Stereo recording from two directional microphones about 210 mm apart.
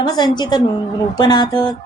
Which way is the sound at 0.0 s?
20° left (ahead or behind).